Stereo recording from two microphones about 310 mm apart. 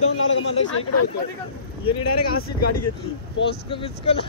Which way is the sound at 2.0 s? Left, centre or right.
Left.